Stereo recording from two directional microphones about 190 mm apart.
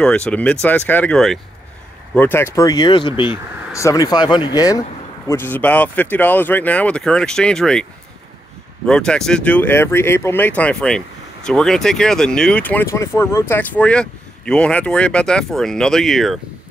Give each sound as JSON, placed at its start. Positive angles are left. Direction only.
{"t": 0.0, "sound": "speech", "side_deg": 5}
{"t": 8.8, "sound": "speech", "side_deg": 5}